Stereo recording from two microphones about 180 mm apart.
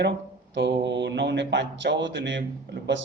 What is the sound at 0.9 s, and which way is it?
A man's voice, 75° right (ahead or behind).